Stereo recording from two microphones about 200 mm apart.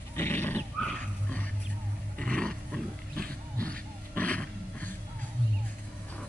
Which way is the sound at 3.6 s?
5° left (ahead or behind).